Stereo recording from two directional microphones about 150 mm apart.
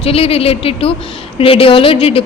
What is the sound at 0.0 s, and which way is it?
A woman's voice, 40° left (ahead or behind).